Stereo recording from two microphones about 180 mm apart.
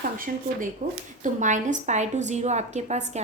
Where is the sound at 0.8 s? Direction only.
45° right (ahead or behind).